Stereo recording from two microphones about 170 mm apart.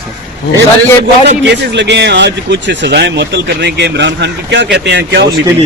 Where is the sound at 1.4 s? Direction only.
85° right.